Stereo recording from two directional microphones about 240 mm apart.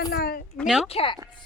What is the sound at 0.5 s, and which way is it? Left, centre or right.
Speech, centre.